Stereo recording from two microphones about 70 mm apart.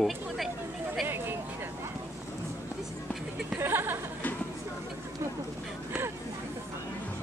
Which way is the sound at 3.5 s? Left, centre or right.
Right.